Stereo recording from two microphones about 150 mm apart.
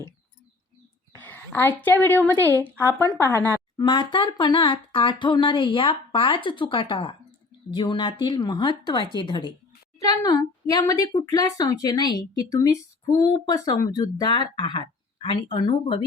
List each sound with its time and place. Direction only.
1.2 s a woman's voice: 10° left (ahead or behind)
3.8 s a woman's voice: 30° left (ahead or behind)